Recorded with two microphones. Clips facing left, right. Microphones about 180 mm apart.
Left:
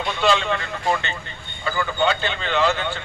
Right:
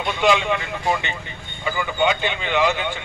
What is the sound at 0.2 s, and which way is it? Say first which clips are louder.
Speech: right 2 dB; 15° right (ahead or behind).